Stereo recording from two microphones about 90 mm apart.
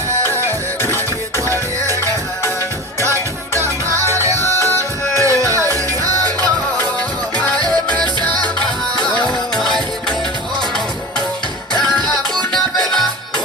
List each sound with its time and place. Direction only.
3.0 s music: 35° right (ahead or behind)
4.0 s music: 30° left (ahead or behind)
5.2 s music: 35° right (ahead or behind)
9.6 s music: 5° left (ahead or behind)
11.8 s music: 5° left (ahead or behind)